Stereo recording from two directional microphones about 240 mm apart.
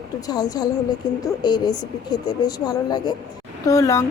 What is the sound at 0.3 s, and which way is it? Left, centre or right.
A woman's voice, centre.